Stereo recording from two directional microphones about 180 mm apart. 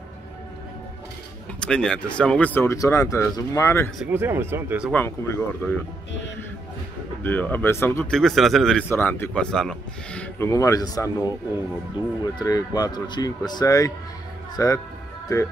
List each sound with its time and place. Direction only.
1.6 s speech: 5° left (ahead or behind)
4.0 s speech: 10° right (ahead or behind)
4.9 s speech: 10° left (ahead or behind)
7.2 s speech: 10° left (ahead or behind)
10.5 s speech: 20° left (ahead or behind)
12.4 s speech: 20° left (ahead or behind)